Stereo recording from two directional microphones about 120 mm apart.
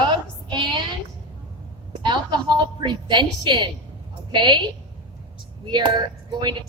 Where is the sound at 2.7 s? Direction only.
40° right (ahead or behind).